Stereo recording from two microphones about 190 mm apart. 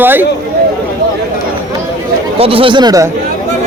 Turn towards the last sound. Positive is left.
turn(degrees=-20)  # may be behind; listen again after turning